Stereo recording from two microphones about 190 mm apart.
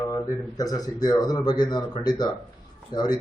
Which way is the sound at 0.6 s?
20° left (ahead or behind).